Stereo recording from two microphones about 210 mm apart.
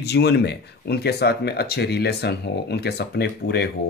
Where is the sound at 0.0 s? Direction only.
50° left (ahead or behind).